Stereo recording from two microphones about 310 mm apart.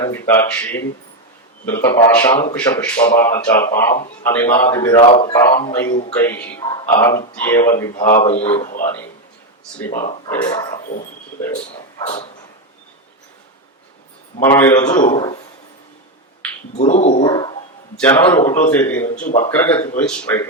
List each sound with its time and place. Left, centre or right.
0.0 s speech: centre
5.9 s speech: left
6.1 s speech: centre
8.6 s speech: left
9.9 s speech: left
10.2 s speech: centre
14.4 s speech: centre
16.7 s speech: left